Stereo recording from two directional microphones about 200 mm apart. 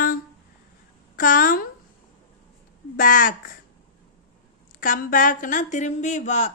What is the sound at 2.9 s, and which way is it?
Speech, 40° left (ahead or behind).